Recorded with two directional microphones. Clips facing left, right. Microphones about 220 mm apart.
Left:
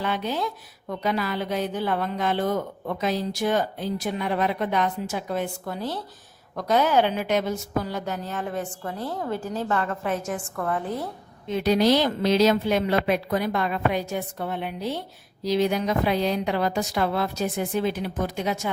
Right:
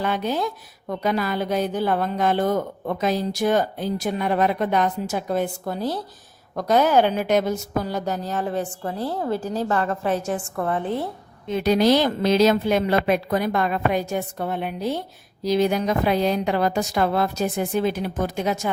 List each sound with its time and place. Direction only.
0.0 s a woman's voice: 45° right (ahead or behind); by 11.0 s 25° right (ahead or behind)
11.5 s a woman's voice: 45° right (ahead or behind)